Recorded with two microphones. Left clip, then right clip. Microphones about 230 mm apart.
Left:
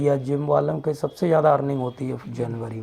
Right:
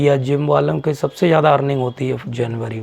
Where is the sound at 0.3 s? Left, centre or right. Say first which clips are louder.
Right 5 dB; right.